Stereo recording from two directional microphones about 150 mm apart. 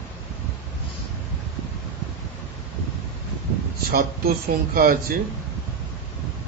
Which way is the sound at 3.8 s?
80° right.